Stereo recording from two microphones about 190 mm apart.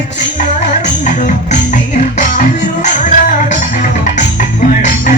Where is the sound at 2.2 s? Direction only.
40° left (ahead or behind).